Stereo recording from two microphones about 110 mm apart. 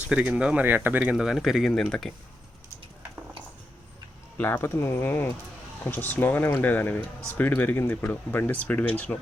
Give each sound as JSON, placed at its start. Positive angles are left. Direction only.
{"t": 0.1, "sound": "speech", "side_deg": -10}
{"t": 1.1, "sound": "speech", "side_deg": 0}
{"t": 4.4, "sound": "speech", "side_deg": 20}